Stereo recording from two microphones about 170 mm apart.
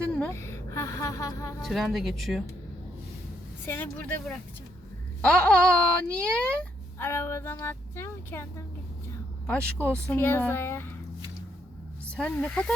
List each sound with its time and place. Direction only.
0.0 s a woman's voice: 5° left (ahead or behind)
1.6 s speech: centre (ahead or behind)
3.7 s speech: 10° left (ahead or behind)
9.5 s speech: 10° left (ahead or behind)
12.1 s speech: 5° left (ahead or behind)